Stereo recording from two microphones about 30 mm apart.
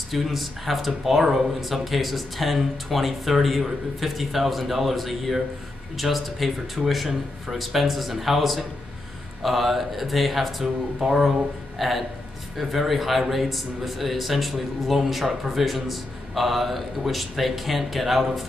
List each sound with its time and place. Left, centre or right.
0.1 s a man's voice: centre
11.0 s speech: centre
11.8 s a man's voice: centre